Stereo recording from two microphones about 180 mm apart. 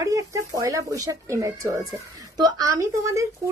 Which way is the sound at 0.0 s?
20° right (ahead or behind).